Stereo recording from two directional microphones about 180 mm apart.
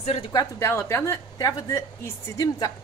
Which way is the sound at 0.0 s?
35° left (ahead or behind).